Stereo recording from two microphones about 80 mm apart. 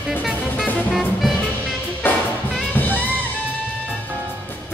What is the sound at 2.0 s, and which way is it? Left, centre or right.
Music, left.